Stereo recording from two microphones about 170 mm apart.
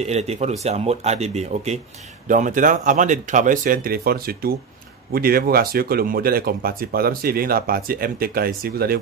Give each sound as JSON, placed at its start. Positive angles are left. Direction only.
{"t": 0.0, "sound": "speech", "side_deg": -40}